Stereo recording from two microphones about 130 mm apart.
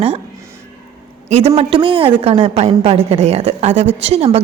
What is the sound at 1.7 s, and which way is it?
A woman's voice, 40° right (ahead or behind).